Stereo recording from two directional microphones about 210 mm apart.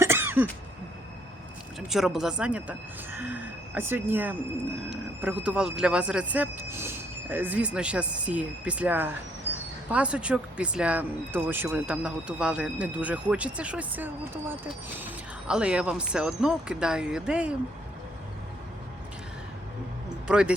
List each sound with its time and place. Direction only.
0.0 s cough: 10° right (ahead or behind)
1.9 s speech: centre (ahead or behind)
20.2 s speech: 5° right (ahead or behind)